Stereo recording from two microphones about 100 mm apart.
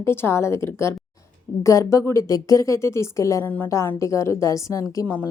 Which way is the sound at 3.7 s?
30° left (ahead or behind).